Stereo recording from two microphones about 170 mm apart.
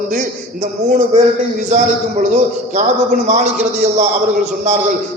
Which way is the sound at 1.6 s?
45° right (ahead or behind).